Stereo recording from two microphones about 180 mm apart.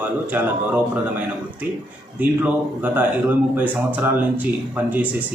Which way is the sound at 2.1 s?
10° right (ahead or behind).